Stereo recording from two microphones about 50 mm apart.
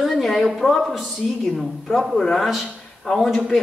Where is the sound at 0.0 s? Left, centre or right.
Centre.